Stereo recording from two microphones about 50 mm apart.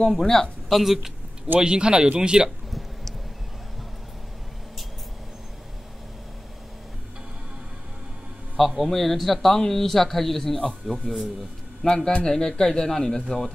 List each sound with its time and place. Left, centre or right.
0.0 s speech: centre
0.7 s a man's voice: centre
1.6 s speech: centre
8.5 s a man's voice: centre
11.8 s a man's voice: centre